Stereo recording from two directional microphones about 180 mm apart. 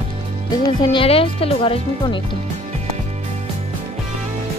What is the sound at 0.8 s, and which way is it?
A woman's voice, 30° left (ahead or behind).